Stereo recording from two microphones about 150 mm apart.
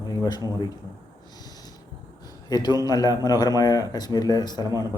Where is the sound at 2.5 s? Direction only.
25° left (ahead or behind).